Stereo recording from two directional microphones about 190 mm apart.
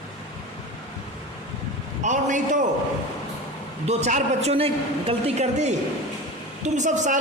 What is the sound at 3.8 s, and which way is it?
A woman's voice, 35° right (ahead or behind).